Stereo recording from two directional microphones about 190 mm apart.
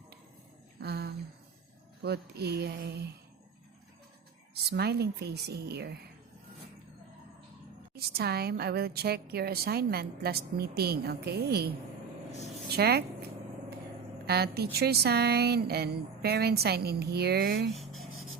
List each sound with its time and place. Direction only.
0.8 s a sound: 55° right (ahead or behind)
2.0 s a woman's voice: 60° right (ahead or behind)
4.7 s a woman's voice: 60° right (ahead or behind)
7.9 s a woman's voice: 55° right (ahead or behind)
12.7 s a woman's voice: 55° right (ahead or behind)
14.3 s a woman's voice: 55° right (ahead or behind)
17.7 s writing: centre (ahead or behind)